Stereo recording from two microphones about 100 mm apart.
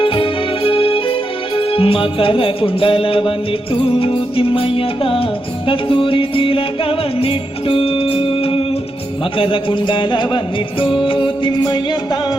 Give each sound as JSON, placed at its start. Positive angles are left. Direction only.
{"t": 0.0, "sound": "music", "side_deg": 60}